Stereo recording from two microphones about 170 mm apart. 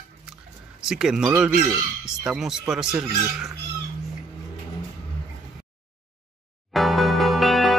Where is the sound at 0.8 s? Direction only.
5° right (ahead or behind).